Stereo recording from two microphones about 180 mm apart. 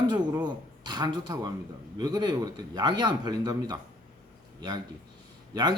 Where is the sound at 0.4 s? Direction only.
25° right (ahead or behind).